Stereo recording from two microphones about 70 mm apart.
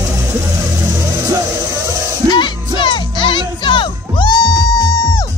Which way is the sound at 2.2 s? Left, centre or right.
Left.